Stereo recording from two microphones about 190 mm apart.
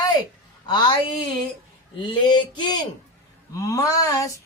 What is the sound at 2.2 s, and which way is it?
Speech, 25° left (ahead or behind).